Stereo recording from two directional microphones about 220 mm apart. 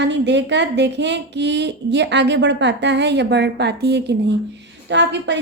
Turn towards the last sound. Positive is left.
turn(degrees=-50)  # may be behind; listen again after turning